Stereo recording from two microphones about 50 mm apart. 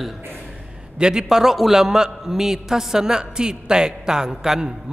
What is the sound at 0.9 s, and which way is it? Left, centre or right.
A man's voice, centre.